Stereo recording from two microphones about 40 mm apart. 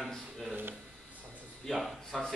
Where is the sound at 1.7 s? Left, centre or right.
Centre.